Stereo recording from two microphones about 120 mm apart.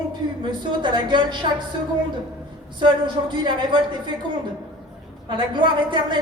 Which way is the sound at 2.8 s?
40° right (ahead or behind).